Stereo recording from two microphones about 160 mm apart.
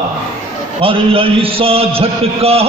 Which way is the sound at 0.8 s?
35° right (ahead or behind).